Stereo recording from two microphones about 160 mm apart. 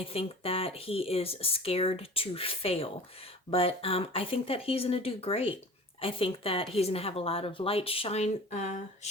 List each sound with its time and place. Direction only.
0.0 s speech: 35° left (ahead or behind)